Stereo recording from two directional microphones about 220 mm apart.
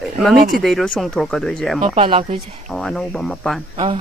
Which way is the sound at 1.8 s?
25° right (ahead or behind).